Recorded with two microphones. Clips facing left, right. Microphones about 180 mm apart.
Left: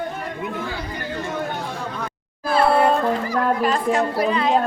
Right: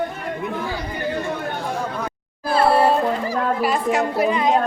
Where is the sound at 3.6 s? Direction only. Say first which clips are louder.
Even; 10° right (ahead or behind).